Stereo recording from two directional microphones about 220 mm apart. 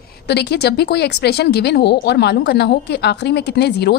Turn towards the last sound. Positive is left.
turn(degrees=50)  # may be behind; listen again after turning